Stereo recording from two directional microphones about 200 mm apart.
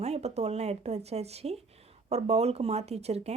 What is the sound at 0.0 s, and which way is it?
Speech, 30° right (ahead or behind).